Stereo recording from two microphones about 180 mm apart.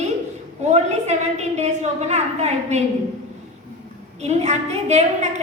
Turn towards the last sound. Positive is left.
turn(degrees=-40)  # may be behind; listen again after turning